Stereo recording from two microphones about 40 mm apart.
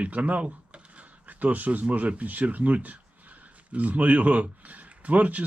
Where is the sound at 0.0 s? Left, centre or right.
Right.